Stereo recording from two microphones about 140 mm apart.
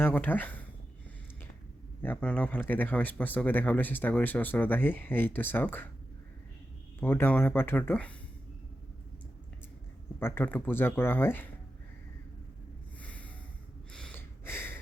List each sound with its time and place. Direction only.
0.0 s speech: 15° left (ahead or behind)
2.0 s speech: 10° left (ahead or behind)
7.0 s speech: 15° left (ahead or behind)
10.2 s speech: 15° left (ahead or behind)
13.0 s snort: 10° left (ahead or behind)
13.9 s gasp: 5° left (ahead or behind)
14.2 s a sound: 15° left (ahead or behind)